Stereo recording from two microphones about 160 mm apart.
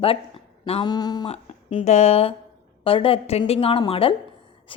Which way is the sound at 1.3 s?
40° left (ahead or behind).